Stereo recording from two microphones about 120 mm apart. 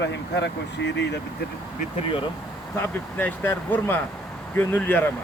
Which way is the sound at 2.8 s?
15° left (ahead or behind).